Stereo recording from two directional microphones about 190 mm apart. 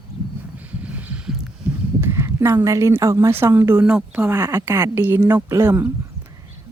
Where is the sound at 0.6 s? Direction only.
10° right (ahead or behind).